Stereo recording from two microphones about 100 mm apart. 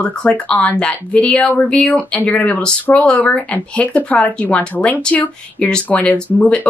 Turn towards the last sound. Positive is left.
turn(degrees=15)  # may be behind; listen again after turning